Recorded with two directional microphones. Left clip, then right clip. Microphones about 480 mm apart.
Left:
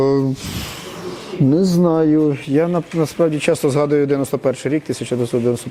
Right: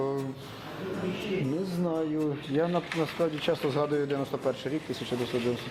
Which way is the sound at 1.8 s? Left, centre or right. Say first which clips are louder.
Left 14 dB; left.